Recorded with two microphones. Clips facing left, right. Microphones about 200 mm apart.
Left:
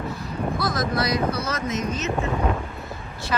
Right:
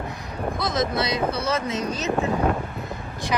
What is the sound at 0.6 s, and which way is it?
Speech, 20° right (ahead or behind).